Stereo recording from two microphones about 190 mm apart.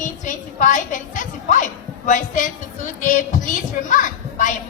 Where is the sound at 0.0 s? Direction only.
40° left (ahead or behind).